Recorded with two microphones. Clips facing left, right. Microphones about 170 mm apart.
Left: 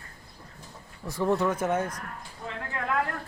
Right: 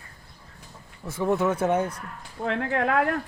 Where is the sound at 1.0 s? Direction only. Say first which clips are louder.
Right 1 dB; 20° right (ahead or behind).